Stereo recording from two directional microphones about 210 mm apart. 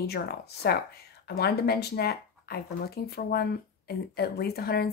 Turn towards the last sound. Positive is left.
turn(degrees=50)  # may be behind; listen again after turning